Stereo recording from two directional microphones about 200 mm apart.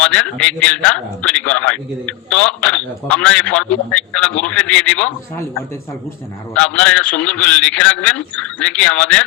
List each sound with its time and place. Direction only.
0.0 s a man's voice: 5° left (ahead or behind)